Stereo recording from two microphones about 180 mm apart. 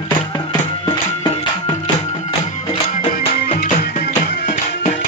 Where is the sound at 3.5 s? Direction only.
40° left (ahead or behind).